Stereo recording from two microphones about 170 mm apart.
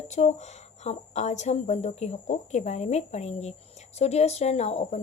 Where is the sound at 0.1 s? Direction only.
40° left (ahead or behind).